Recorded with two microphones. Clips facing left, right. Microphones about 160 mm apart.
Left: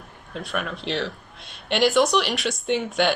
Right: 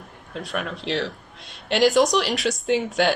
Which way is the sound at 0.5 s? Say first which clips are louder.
Right 1 dB; 30° right (ahead or behind).